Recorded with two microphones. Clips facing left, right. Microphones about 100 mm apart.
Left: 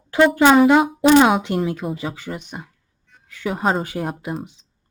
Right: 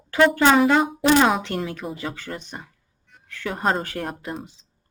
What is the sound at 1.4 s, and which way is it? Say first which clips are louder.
A woman's voice: left 5 dB; 20° left (ahead or behind).